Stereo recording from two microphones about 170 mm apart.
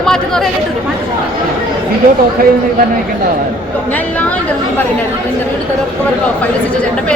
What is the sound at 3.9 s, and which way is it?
Speech, 10° left (ahead or behind).